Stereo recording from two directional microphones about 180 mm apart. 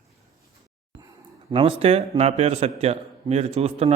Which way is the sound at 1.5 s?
30° right (ahead or behind).